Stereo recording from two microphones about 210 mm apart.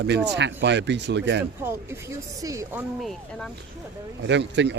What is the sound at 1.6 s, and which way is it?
Speech, 10° right (ahead or behind).